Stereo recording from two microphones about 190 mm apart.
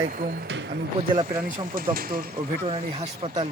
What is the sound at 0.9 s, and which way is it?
Speech, 30° right (ahead or behind).